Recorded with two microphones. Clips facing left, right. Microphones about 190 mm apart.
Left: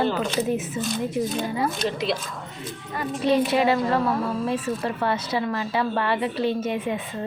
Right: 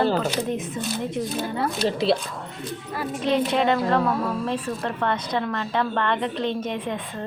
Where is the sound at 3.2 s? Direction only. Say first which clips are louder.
Left 1 dB; 5° left (ahead or behind).